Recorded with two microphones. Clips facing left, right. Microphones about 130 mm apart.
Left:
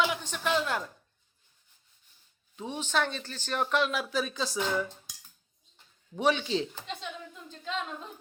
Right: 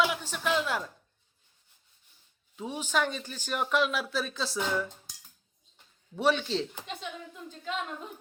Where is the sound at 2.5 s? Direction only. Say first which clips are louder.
Even; 5° right (ahead or behind).